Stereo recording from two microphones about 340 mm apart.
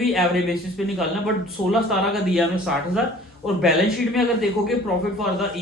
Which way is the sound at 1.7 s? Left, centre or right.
Centre.